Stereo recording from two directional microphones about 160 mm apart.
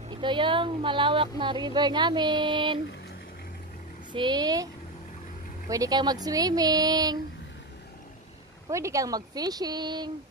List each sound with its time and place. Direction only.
0.1 s speech: 30° right (ahead or behind)
4.1 s speech: 30° right (ahead or behind)
5.7 s speech: 25° right (ahead or behind)
8.6 s speech: 20° right (ahead or behind)